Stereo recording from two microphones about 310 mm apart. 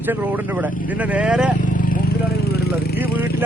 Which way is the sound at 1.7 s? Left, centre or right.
Left.